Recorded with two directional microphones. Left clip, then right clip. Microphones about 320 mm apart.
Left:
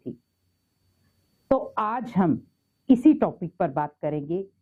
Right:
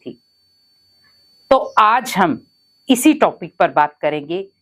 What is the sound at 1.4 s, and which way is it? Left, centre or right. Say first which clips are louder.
A woman's voice: right 12 dB; centre.